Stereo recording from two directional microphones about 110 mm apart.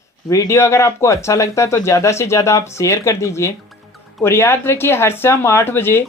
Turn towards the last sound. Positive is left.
turn(degrees=20)  # may be behind; listen again after turning